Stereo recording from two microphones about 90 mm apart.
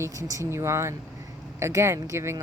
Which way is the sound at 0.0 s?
35° right (ahead or behind).